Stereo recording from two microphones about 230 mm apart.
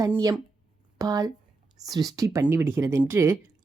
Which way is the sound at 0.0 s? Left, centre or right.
Centre.